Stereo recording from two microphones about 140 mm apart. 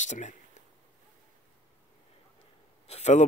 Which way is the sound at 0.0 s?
60° left (ahead or behind).